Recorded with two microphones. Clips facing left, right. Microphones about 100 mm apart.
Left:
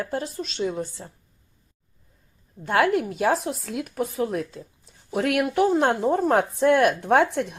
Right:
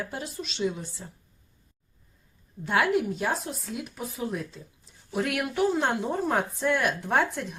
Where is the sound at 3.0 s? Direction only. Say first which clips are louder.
Left 6 dB; 80° left.